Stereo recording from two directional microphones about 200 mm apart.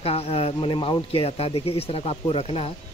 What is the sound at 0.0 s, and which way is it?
Speech, 30° left (ahead or behind).